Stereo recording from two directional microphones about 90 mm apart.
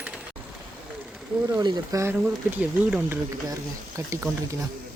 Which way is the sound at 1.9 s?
30° right (ahead or behind).